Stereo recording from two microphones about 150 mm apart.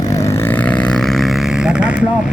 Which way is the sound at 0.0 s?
20° left (ahead or behind).